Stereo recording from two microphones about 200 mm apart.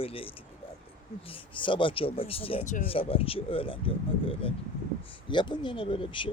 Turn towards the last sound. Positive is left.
turn(degrees=25)  # may be behind; listen again after turning